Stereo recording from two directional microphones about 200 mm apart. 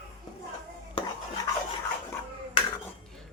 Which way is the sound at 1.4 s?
15° left (ahead or behind).